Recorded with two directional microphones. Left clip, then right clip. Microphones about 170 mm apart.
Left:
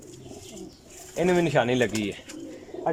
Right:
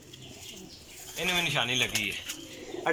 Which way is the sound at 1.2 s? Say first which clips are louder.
Left 5 dB; 60° left (ahead or behind).